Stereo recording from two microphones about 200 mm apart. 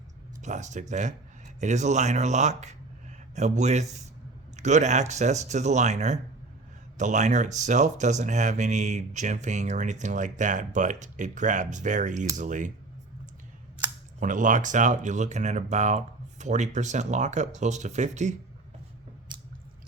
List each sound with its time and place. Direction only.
0.4 s speech: 35° right (ahead or behind)
14.2 s speech: 40° right (ahead or behind)